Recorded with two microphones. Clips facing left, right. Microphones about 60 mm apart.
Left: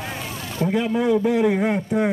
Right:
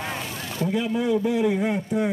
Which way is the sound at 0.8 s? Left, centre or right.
Left.